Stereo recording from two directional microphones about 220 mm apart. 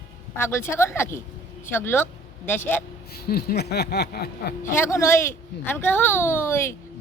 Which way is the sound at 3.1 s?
45° left (ahead or behind).